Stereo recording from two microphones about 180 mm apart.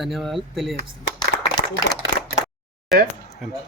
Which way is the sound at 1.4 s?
25° left (ahead or behind).